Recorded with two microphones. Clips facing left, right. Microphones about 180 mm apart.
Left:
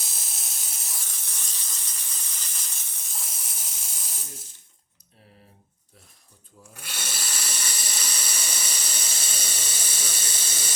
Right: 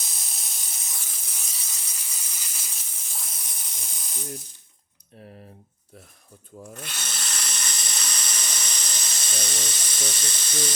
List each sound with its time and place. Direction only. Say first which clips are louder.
0.0 s steam: even; centre (ahead or behind)
6.7 s steam: right 1 dB; 10° left (ahead or behind)